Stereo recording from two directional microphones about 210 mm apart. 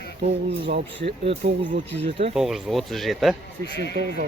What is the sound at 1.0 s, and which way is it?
Speech, 25° right (ahead or behind).